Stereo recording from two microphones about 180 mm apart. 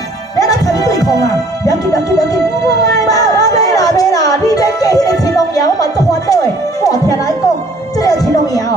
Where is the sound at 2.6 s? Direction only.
20° left (ahead or behind).